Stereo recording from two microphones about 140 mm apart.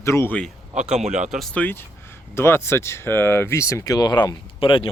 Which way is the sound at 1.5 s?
10° left (ahead or behind).